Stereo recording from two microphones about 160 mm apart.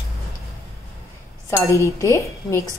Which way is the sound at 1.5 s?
20° left (ahead or behind).